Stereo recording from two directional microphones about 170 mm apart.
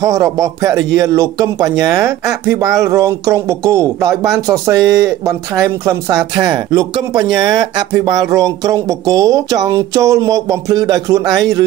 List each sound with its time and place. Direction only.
0.0 s speech: 20° right (ahead or behind)